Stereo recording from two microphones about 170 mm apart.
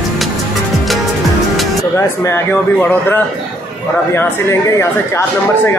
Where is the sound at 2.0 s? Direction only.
15° left (ahead or behind).